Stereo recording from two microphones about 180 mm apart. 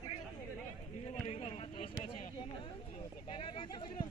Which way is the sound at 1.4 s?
30° left (ahead or behind).